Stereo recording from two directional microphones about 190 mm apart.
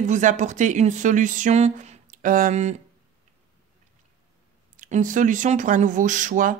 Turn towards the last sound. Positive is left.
turn(degrees=-45)  # may be behind; listen again after turning